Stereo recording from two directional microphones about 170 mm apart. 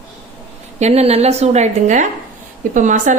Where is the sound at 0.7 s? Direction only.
40° right (ahead or behind).